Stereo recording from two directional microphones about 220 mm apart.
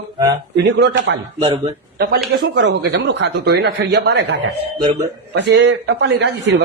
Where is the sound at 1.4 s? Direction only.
25° right (ahead or behind).